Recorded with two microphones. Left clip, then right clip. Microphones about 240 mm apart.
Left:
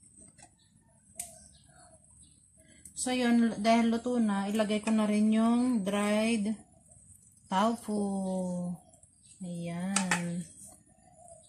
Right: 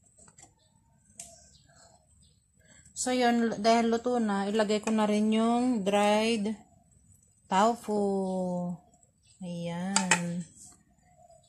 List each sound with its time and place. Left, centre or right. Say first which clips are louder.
2.9 s a woman's voice: right 3 dB; right
9.6 s a woman's voice: right 3 dB; right